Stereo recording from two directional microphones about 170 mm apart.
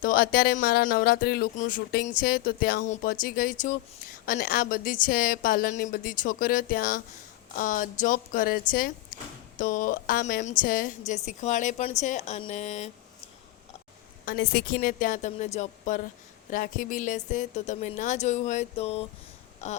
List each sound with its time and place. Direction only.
0.0 s speech: 55° left (ahead or behind)
1.5 s a woman's voice: 50° left (ahead or behind)
2.8 s a woman's voice: 50° left (ahead or behind)
14.3 s a woman's voice: 65° left (ahead or behind); by 16.0 s 45° left (ahead or behind)
16.5 s a woman's voice: 55° left (ahead or behind)